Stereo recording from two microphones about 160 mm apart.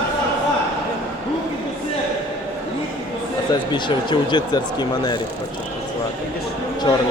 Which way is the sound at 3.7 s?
30° left (ahead or behind).